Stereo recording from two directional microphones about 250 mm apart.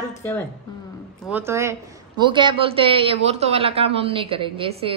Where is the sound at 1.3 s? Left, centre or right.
Centre.